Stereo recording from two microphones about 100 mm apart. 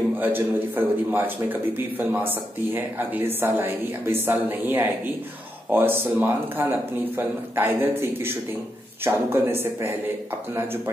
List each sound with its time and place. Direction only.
0.2 s a man's voice: 20° right (ahead or behind)